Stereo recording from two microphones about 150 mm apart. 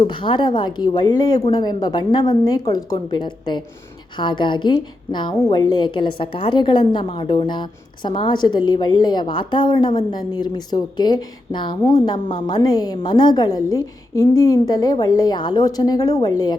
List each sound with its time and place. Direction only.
0.0 s a woman's voice: 35° left (ahead or behind)